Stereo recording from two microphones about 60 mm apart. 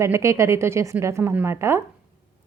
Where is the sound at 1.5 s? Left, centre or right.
Right.